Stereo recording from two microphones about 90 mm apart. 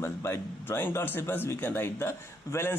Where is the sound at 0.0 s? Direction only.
30° left (ahead or behind).